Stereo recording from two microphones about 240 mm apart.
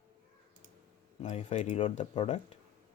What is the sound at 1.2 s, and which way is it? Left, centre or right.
Speech, left.